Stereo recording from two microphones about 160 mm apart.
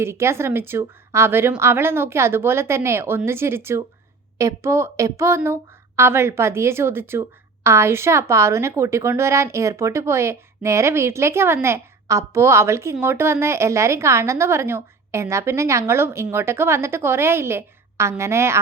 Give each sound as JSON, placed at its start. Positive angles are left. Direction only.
{"t": 0.0, "sound": "a woman's voice", "side_deg": -15}